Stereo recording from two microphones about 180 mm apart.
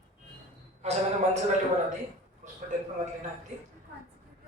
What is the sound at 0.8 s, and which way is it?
Speech, 35° right (ahead or behind).